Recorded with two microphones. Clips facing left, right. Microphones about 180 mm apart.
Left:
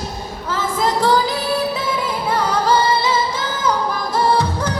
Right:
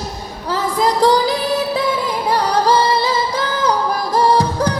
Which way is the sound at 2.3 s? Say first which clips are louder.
Right 2 dB; 35° right (ahead or behind).